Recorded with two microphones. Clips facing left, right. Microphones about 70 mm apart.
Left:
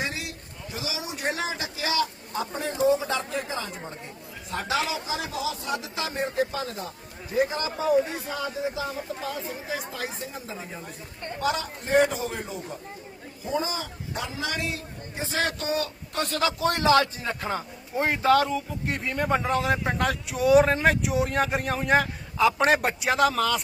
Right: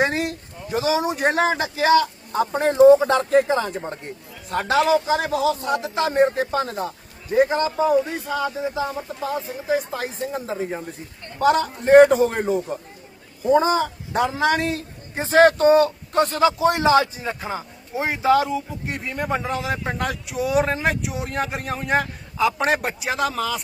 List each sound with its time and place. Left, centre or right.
0.0 s a man's voice: right; by 23.6 s centre